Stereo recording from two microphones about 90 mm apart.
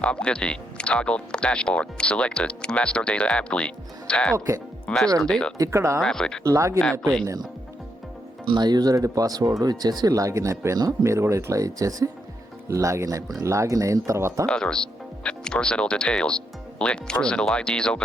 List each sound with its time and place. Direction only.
0.0 s speech: 10° left (ahead or behind)
4.4 s speech: 30° right (ahead or behind)
4.9 s speech: 10° left (ahead or behind)
5.5 s speech: 35° right (ahead or behind)
6.0 s speech: 5° left (ahead or behind)
6.4 s speech: 35° right (ahead or behind)
8.4 s speech: 50° right (ahead or behind); by 14.4 s 30° right (ahead or behind)
14.4 s speech: 10° left (ahead or behind)